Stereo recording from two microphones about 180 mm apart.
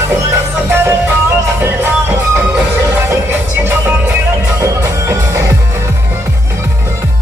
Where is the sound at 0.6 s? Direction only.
10° right (ahead or behind).